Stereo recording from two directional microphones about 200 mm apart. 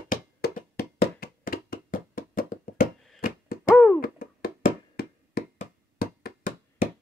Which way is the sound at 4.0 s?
50° left (ahead or behind).